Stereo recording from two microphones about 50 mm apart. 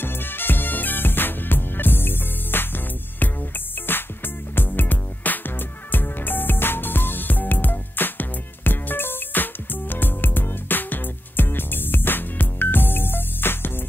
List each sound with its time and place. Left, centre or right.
0.0 s music: left